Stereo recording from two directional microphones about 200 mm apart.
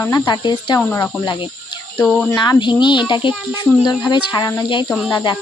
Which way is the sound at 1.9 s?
Centre (ahead or behind).